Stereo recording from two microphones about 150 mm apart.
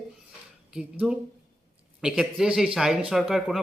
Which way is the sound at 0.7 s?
5° right (ahead or behind).